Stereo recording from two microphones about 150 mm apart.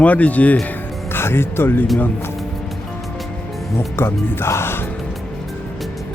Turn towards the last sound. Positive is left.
turn(degrees=15)  # may be behind; listen again after turning